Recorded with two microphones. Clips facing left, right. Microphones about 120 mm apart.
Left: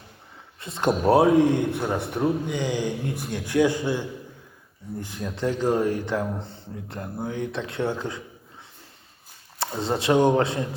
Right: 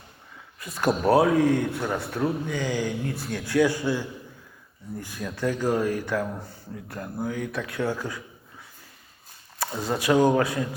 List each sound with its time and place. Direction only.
0.6 s a man's voice: 25° left (ahead or behind)
9.6 s a man's voice: 25° left (ahead or behind)